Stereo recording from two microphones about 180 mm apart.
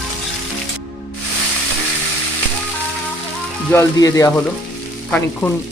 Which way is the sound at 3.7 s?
20° left (ahead or behind).